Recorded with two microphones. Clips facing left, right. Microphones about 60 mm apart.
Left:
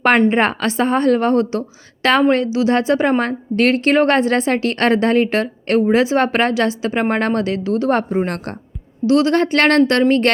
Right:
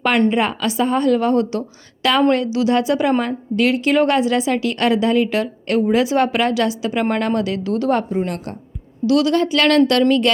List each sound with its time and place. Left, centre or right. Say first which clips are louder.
0.3 s a woman's voice: left 2 dB; left